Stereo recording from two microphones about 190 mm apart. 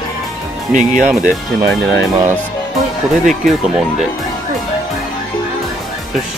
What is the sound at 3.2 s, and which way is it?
Speech, centre (ahead or behind).